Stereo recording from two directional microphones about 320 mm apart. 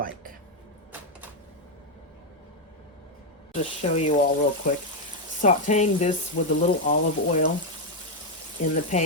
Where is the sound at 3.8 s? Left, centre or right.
Centre.